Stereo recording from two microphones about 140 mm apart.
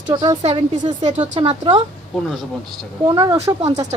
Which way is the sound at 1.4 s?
50° right (ahead or behind).